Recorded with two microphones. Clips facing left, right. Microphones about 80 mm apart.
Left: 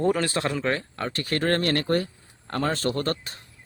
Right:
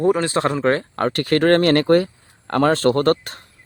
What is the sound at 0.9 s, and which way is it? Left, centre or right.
Speech, right.